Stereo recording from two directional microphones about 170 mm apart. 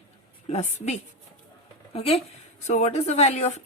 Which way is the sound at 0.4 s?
40° left (ahead or behind).